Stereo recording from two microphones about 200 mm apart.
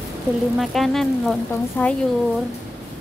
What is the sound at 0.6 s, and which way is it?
A woman's voice, centre (ahead or behind).